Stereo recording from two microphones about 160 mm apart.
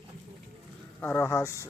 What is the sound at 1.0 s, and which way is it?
Speech, 15° left (ahead or behind).